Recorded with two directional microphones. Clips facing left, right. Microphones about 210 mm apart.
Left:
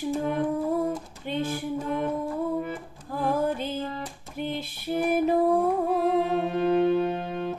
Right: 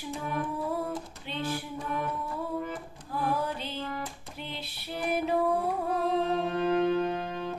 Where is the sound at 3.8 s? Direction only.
25° left (ahead or behind).